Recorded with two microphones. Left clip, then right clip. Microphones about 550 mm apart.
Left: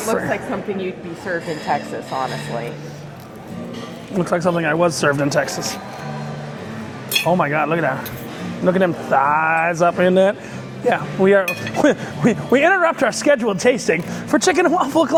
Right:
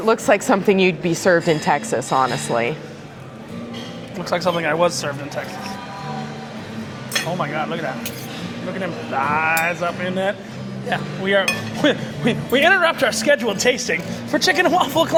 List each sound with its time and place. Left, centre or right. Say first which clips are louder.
0.1 s a woman's voice: right 6 dB; right
4.2 s speech: left 2 dB; left
5.4 s speech: left 9 dB; left
7.1 s speech: left 6 dB; left